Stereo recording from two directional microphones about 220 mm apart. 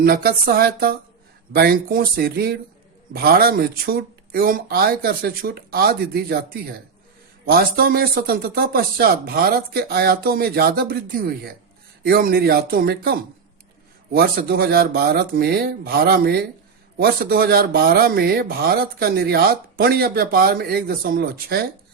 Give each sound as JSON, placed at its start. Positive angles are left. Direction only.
{"t": 0.0, "sound": "speech", "side_deg": -45}